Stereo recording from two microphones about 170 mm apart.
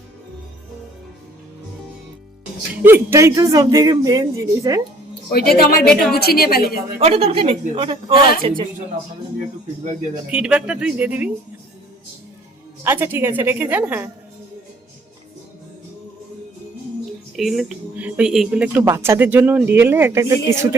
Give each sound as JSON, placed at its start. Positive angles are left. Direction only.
{"t": 2.8, "sound": "a man's voice", "side_deg": -15}
{"t": 5.3, "sound": "a woman's voice", "side_deg": 65}
{"t": 5.8, "sound": "speech", "side_deg": 5}
{"t": 6.1, "sound": "a woman's voice", "side_deg": 65}
{"t": 7.0, "sound": "a woman's voice", "side_deg": -40}
{"t": 10.3, "sound": "speech", "side_deg": -5}
{"t": 12.8, "sound": "speech", "side_deg": -15}
{"t": 17.3, "sound": "speech", "side_deg": 0}